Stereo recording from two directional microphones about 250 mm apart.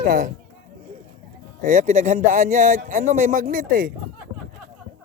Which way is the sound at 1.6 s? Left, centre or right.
Right.